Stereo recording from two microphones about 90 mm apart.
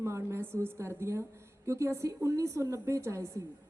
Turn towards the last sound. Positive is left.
turn(degrees=-30)  # may be behind; listen again after turning